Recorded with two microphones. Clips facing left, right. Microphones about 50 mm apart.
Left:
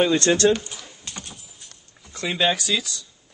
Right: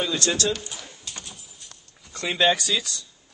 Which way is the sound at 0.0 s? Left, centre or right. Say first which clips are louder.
Left 7 dB; left.